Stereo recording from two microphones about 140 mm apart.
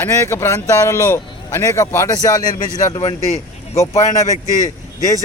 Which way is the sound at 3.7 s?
20° left (ahead or behind).